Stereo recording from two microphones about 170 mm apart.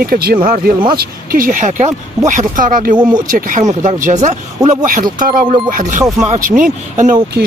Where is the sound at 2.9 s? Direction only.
25° right (ahead or behind).